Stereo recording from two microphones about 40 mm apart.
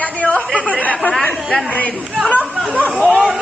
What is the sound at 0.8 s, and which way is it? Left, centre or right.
Chatter, left.